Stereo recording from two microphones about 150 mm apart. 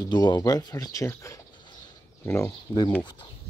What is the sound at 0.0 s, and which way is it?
Speech, 30° left (ahead or behind).